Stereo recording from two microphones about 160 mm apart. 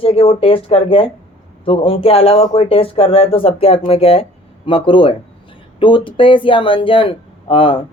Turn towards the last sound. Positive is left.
turn(degrees=35)  # may be behind; listen again after turning